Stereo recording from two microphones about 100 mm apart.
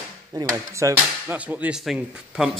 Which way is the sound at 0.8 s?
30° right (ahead or behind).